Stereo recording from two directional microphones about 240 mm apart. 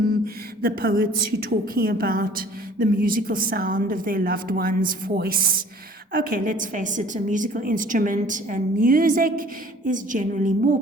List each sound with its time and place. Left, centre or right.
0.6 s a woman's voice: right